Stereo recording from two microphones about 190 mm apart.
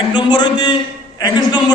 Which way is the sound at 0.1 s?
25° left (ahead or behind).